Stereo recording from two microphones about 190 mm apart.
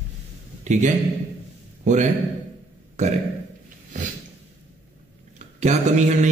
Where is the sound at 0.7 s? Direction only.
40° right (ahead or behind).